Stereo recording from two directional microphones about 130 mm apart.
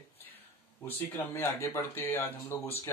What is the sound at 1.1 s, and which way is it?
Speech, 20° left (ahead or behind).